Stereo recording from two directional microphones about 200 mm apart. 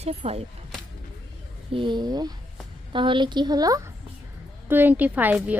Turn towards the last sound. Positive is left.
turn(degrees=-10)  # may be behind; listen again after turning